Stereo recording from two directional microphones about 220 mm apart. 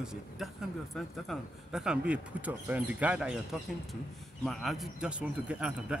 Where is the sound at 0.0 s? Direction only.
Centre (ahead or behind).